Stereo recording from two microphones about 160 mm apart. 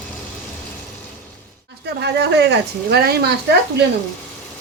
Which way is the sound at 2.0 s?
90° right.